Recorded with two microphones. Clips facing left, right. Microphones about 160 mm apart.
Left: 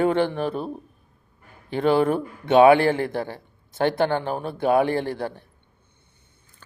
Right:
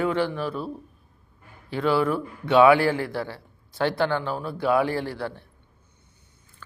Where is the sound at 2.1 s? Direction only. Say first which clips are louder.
Left 2 dB; 20° left (ahead or behind).